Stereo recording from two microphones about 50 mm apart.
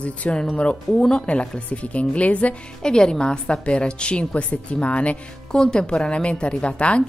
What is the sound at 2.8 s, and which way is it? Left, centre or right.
A woman's voice, centre.